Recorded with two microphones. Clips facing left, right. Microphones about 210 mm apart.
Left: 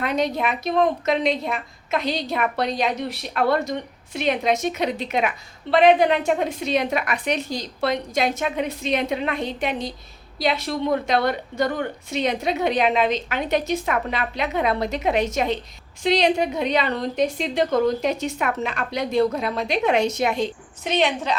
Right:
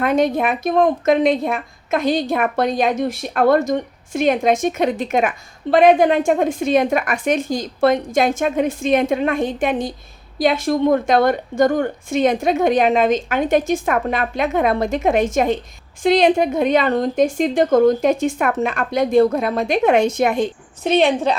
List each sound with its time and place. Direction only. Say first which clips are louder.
0.0 s a woman's voice: right 6 dB; 50° right (ahead or behind)